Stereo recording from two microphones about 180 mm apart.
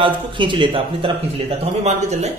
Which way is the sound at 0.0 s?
25° right (ahead or behind).